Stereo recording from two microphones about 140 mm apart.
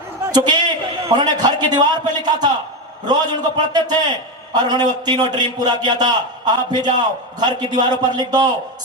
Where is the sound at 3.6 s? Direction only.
30° right (ahead or behind).